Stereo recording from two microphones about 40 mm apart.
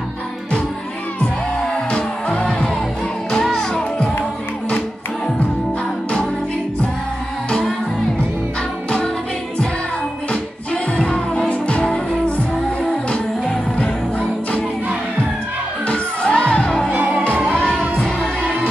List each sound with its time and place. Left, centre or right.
1.7 s music: left
3.3 s music: centre
10.7 s music: left
11.8 s music: left
13.7 s music: left
15.9 s music: left